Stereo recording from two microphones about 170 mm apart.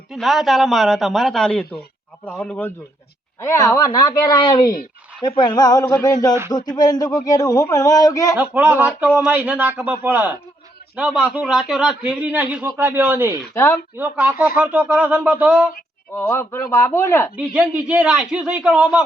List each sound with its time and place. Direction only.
0.1 s a man's voice: centre (ahead or behind); by 8.4 s 20° left (ahead or behind)
8.4 s speech: 10° right (ahead or behind)
13.5 s speech: 15° left (ahead or behind)
13.9 s speech: 10° right (ahead or behind)
16.1 s speech: 15° left (ahead or behind)
17.3 s a man's voice: 5° right (ahead or behind)